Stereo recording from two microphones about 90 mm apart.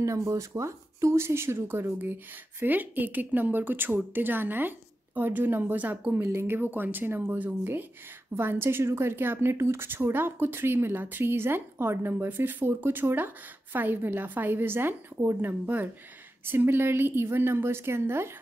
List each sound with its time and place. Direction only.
0.0 s speech: 35° right (ahead or behind)